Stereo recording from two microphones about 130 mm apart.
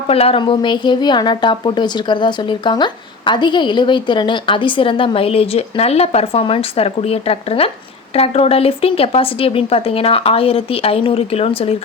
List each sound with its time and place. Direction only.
0.1 s a woman's voice: 50° left (ahead or behind)